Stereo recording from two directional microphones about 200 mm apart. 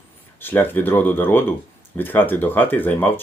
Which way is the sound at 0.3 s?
10° left (ahead or behind).